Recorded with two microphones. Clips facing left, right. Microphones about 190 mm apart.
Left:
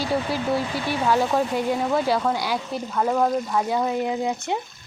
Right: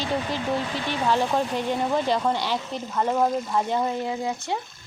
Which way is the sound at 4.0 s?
20° left (ahead or behind).